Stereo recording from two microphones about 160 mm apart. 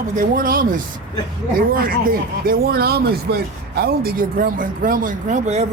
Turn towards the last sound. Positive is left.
turn(degrees=-50)  # may be behind; listen again after turning